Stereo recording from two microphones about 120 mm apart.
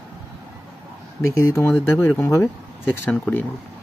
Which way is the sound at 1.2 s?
25° left (ahead or behind).